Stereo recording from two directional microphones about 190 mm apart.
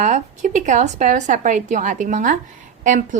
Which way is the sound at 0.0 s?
40° right (ahead or behind).